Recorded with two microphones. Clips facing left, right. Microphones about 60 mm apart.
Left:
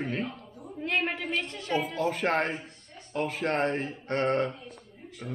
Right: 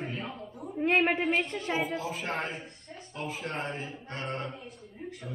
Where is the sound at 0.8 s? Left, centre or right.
Right.